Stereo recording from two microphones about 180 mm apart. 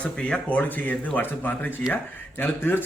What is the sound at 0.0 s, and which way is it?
Speech, 5° left (ahead or behind).